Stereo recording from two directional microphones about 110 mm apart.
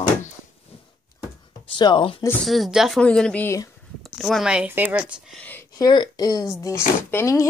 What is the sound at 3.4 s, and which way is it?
Speech, 30° left (ahead or behind).